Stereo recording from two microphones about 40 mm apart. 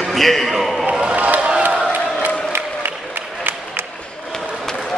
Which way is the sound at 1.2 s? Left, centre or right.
Right.